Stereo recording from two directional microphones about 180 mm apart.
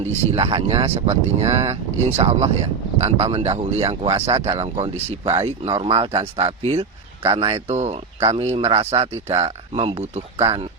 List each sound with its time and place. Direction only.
0.0 s speech: 35° right (ahead or behind)